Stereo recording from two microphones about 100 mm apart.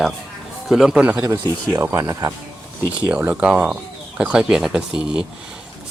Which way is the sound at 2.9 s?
15° right (ahead or behind).